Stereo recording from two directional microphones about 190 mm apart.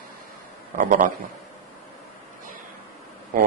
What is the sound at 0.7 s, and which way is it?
Speech, 45° right (ahead or behind).